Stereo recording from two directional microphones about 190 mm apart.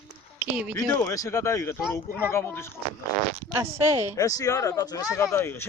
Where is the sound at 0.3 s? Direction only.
5° right (ahead or behind).